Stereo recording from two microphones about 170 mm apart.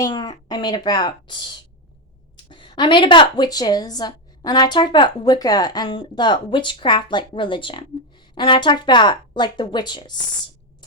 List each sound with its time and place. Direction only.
0.0 s a woman's voice: 25° left (ahead or behind)